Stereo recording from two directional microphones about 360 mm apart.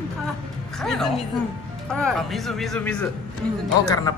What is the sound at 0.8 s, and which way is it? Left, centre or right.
Speech, centre.